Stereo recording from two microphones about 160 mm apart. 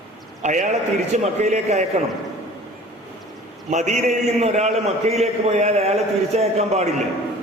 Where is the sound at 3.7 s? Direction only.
45° right (ahead or behind).